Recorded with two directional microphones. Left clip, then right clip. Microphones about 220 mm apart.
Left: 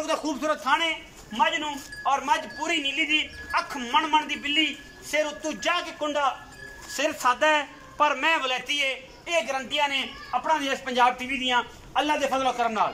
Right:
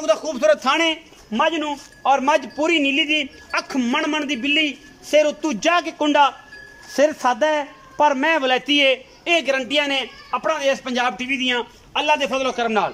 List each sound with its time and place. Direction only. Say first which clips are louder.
0.0 s a man's voice: right 9 dB; 50° right (ahead or behind)
7.0 s a man's voice: right 6 dB; 30° right (ahead or behind)